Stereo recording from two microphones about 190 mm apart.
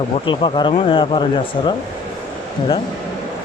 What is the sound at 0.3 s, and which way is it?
Speech, 25° left (ahead or behind).